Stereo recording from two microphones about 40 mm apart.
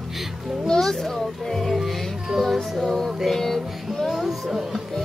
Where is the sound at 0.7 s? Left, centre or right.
Centre.